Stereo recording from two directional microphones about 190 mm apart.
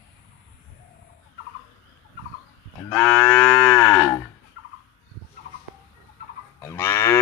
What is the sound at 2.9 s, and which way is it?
Cattle, 5° left (ahead or behind).